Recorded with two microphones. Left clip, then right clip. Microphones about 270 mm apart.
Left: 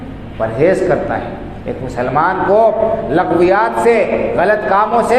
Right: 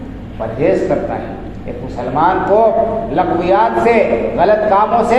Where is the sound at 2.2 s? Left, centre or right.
Left.